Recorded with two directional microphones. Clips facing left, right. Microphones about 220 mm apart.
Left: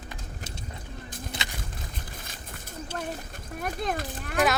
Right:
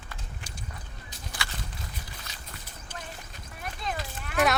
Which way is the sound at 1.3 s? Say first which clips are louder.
Even; 20° left (ahead or behind).